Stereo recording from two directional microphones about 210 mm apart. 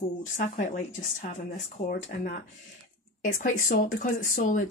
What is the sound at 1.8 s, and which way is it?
Speech, 40° left (ahead or behind).